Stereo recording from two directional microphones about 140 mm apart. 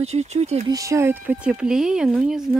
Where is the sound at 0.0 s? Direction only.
50° right (ahead or behind).